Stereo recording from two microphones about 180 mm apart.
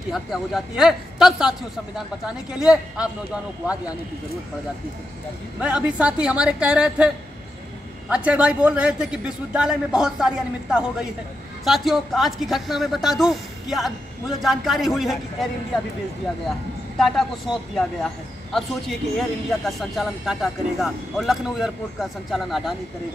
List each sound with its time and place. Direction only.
0.1 s speech: centre (ahead or behind)
5.6 s speech: 5° right (ahead or behind)
8.1 s speech: 5° right (ahead or behind)
17.0 s speech: centre (ahead or behind)